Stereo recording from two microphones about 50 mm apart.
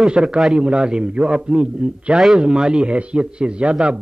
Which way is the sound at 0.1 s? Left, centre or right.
Centre.